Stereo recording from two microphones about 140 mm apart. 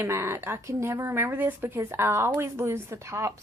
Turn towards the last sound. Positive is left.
turn(degrees=-20)  # may be behind; listen again after turning